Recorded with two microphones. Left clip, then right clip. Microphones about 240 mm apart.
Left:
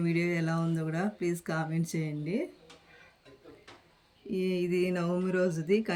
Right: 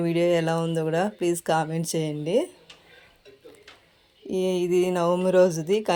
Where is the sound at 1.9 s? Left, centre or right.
Right.